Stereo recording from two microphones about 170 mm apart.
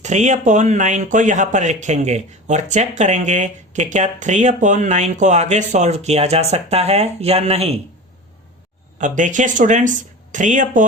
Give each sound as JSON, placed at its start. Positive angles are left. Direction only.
{"t": 0.0, "sound": "speech", "side_deg": -45}
{"t": 9.0, "sound": "speech", "side_deg": -45}